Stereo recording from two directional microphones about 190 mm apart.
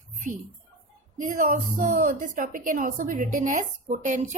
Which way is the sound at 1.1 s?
45° right (ahead or behind).